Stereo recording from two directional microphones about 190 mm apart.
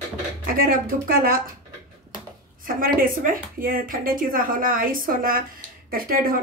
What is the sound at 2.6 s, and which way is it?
Speech, 50° right (ahead or behind).